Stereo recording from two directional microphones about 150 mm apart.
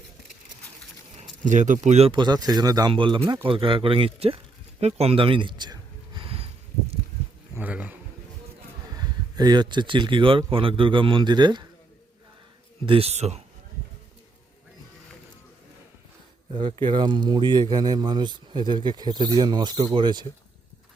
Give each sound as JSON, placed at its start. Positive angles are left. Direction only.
{"t": 1.1, "sound": "speech", "side_deg": -55}
{"t": 6.1, "sound": "a sound", "side_deg": -40}
{"t": 7.5, "sound": "a man's voice", "side_deg": -10}
{"t": 9.0, "sound": "speech", "side_deg": -25}
{"t": 12.8, "sound": "speech", "side_deg": -40}
{"t": 16.5, "sound": "speech", "side_deg": -35}